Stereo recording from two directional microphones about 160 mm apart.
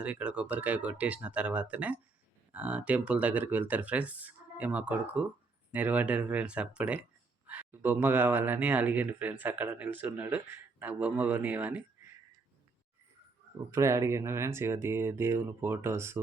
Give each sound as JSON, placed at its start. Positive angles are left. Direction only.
{"t": 0.0, "sound": "speech", "side_deg": -10}
{"t": 13.7, "sound": "speech", "side_deg": -20}